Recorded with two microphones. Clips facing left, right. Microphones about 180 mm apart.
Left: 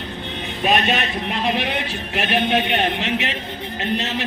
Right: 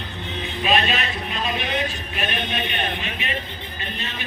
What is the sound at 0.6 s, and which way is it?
A man's voice, 60° left (ahead or behind).